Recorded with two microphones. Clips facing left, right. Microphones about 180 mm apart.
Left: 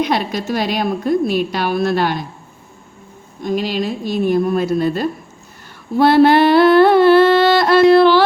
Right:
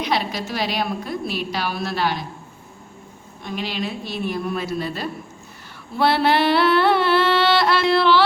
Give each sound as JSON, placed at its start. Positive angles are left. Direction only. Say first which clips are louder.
{"t": 0.0, "sound": "a woman's voice", "louder": "left 5 dB", "side_deg": 50}
{"t": 3.4, "sound": "a woman's voice", "louder": "left 8 dB", "side_deg": 40}
{"t": 6.0, "sound": "a sound", "louder": "left 8 dB", "side_deg": 45}